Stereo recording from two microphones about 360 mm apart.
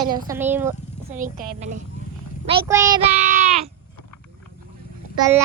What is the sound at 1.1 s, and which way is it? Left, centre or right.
A woman's voice, right.